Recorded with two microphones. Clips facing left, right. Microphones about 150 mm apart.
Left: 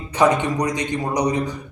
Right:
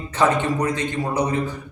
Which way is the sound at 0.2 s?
15° left (ahead or behind).